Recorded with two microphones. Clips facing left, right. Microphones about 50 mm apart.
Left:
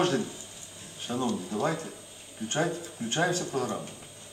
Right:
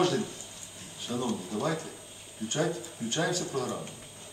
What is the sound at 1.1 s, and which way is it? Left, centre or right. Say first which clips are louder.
Speech: left 2 dB; centre.